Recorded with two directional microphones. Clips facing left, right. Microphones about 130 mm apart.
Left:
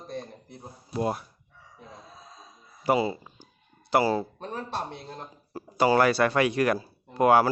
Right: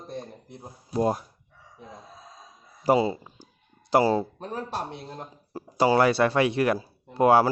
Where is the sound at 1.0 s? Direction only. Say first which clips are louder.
Right 4 dB; 35° right (ahead or behind).